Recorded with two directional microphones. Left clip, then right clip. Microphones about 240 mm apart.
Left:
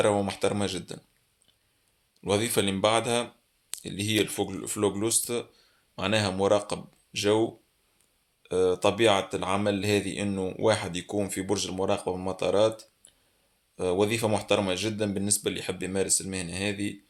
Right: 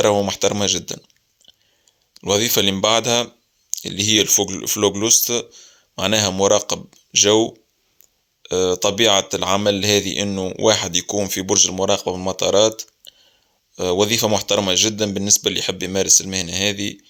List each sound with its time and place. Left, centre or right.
0.0 s speech: right
2.1 s speech: right